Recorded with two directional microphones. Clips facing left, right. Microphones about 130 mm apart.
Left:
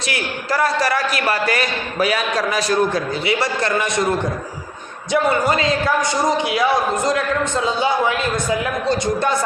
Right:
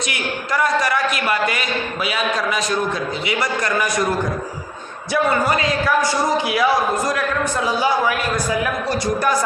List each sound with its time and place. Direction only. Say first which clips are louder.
0.1 s a man's voice: left 5 dB; 35° left (ahead or behind)
5.1 s a man's voice: left 1 dB; 25° left (ahead or behind)